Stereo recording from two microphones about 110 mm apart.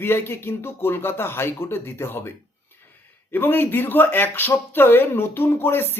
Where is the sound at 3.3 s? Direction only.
20° left (ahead or behind).